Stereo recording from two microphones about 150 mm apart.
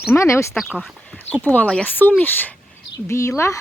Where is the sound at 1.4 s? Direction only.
10° left (ahead or behind).